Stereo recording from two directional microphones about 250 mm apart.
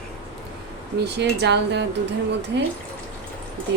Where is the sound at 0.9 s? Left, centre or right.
Right.